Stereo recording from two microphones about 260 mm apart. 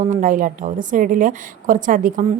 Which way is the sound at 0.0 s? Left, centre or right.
Right.